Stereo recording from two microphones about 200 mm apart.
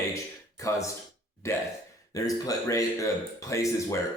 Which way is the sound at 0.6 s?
15° left (ahead or behind).